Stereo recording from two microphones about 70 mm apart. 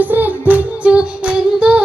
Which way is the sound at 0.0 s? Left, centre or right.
Right.